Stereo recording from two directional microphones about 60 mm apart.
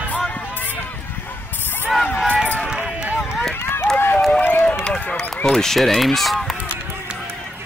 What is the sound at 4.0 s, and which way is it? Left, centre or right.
Run, left.